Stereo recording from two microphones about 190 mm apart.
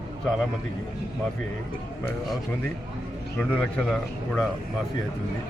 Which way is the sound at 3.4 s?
5° left (ahead or behind).